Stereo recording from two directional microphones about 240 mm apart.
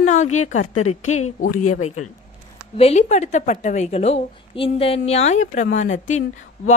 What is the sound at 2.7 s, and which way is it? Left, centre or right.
A woman's voice, left.